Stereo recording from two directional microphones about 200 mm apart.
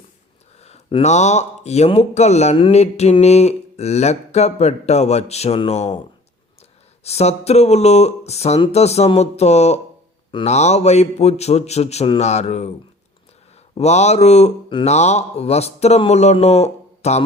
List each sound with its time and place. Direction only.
0.6 s speech: 30° left (ahead or behind)
7.0 s speech: 30° left (ahead or behind)
13.7 s speech: 35° left (ahead or behind)